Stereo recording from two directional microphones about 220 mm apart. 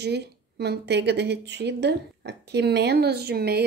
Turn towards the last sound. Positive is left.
turn(degrees=-45)  # may be behind; listen again after turning